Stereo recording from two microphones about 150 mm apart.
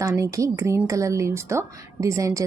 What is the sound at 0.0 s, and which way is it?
A woman's voice, 20° right (ahead or behind).